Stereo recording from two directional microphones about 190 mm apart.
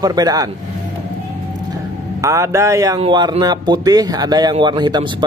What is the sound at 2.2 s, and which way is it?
A man's voice, 15° right (ahead or behind).